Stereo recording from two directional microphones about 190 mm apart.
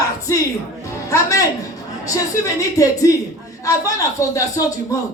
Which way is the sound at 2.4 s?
20° left (ahead or behind).